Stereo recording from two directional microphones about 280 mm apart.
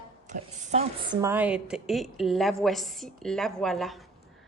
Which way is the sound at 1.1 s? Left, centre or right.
Centre.